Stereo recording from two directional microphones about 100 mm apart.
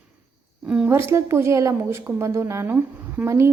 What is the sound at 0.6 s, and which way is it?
Speech, 10° right (ahead or behind).